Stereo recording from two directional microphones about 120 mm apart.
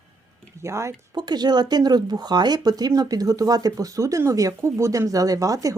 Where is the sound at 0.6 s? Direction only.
25° right (ahead or behind).